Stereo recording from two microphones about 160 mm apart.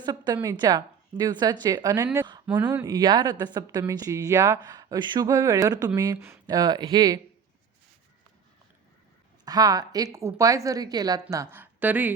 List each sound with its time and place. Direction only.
0.0 s a sound: 25° right (ahead or behind)
0.4 s speech: 25° right (ahead or behind)
9.4 s speech: 25° right (ahead or behind)